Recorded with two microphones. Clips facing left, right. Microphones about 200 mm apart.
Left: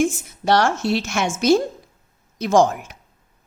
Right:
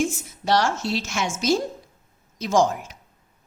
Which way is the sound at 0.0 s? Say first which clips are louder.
Left 5 dB; 60° left (ahead or behind).